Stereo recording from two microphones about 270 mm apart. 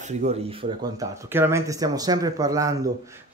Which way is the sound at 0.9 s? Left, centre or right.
Centre.